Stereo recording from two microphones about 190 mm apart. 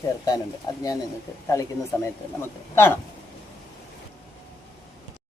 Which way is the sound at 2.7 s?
15° left (ahead or behind).